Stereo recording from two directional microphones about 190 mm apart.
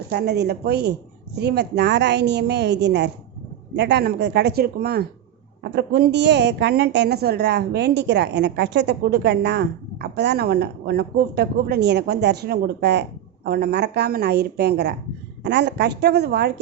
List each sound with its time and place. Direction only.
0.1 s a woman's voice: 60° right (ahead or behind)